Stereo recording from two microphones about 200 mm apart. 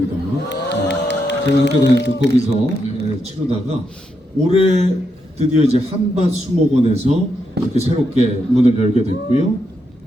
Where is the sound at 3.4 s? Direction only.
15° right (ahead or behind).